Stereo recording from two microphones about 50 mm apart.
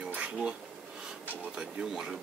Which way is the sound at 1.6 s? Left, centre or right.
Centre.